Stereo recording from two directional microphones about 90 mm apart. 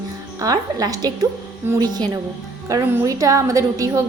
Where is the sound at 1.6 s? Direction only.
25° right (ahead or behind).